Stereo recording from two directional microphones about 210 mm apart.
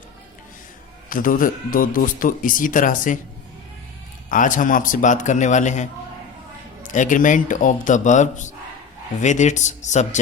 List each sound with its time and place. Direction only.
1.1 s speech: 40° left (ahead or behind)
4.3 s speech: 40° left (ahead or behind)